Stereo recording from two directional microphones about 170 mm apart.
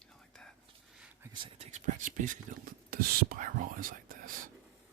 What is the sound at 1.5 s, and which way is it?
Speech, 40° right (ahead or behind).